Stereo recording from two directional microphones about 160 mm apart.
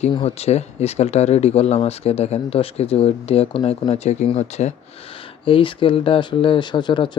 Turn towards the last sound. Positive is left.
turn(degrees=30)  # may be behind; listen again after turning